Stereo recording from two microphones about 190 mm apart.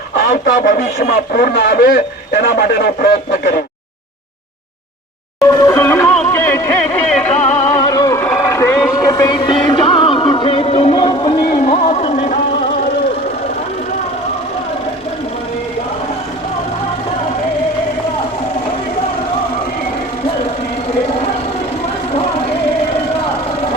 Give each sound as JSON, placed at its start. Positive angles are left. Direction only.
{"t": 0.2, "sound": "speech", "side_deg": 50}
{"t": 5.4, "sound": "music", "side_deg": 20}
{"t": 11.7, "sound": "vehicle", "side_deg": 35}